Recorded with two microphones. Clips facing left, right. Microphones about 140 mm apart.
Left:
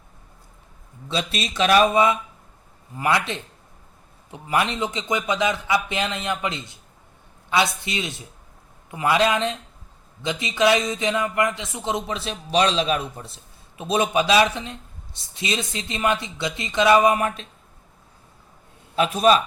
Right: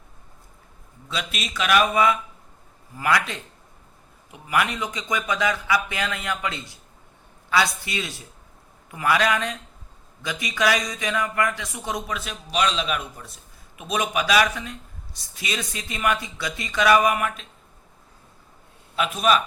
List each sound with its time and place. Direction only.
1.0 s speech: 30° left (ahead or behind)
18.9 s speech: 35° left (ahead or behind)